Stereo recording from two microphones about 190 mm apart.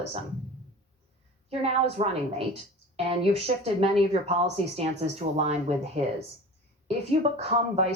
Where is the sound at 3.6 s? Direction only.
35° right (ahead or behind).